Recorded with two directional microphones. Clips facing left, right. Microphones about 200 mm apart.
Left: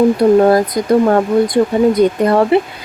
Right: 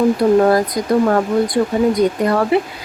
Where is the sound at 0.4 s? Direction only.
25° left (ahead or behind).